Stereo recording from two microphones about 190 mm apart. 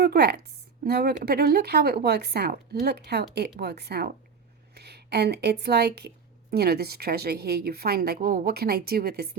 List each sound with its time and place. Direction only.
0.0 s a woman's voice: 55° right (ahead or behind)